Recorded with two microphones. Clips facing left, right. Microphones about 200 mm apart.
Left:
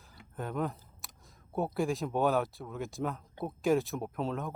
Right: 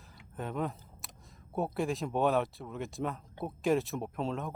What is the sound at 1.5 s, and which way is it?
Speech, centre (ahead or behind).